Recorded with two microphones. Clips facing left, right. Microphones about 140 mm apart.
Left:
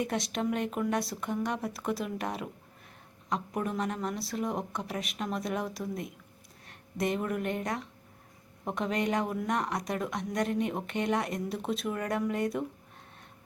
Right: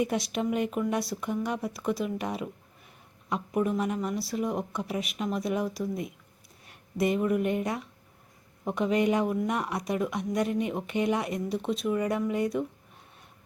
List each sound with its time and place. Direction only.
0.0 s speech: 5° right (ahead or behind)